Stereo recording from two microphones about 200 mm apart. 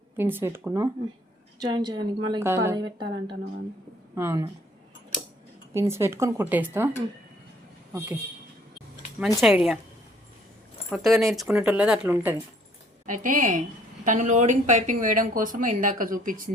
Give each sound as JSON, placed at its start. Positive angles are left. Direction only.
{"t": 0.2, "sound": "a woman's voice", "side_deg": -10}
{"t": 5.7, "sound": "speech", "side_deg": -15}
{"t": 7.9, "sound": "speech", "side_deg": -10}
{"t": 9.4, "sound": "speech", "side_deg": 0}
{"t": 10.8, "sound": "speech", "side_deg": 0}
{"t": 13.1, "sound": "a woman's voice", "side_deg": -40}